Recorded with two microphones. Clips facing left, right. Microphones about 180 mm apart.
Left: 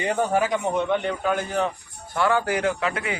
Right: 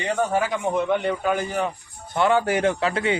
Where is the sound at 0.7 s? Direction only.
10° right (ahead or behind).